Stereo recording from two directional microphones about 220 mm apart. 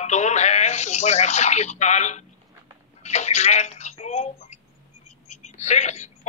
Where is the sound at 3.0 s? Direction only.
30° left (ahead or behind).